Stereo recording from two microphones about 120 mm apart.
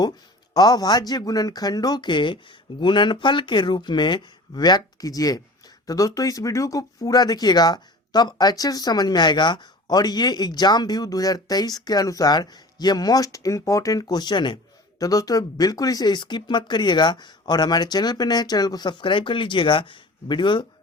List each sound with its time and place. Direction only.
0.5 s speech: 35° left (ahead or behind)